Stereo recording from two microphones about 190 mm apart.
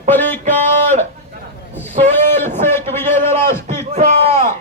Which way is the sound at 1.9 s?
40° right (ahead or behind).